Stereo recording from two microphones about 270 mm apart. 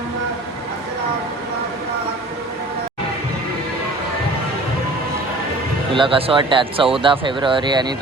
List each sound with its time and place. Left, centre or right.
5.9 s speech: centre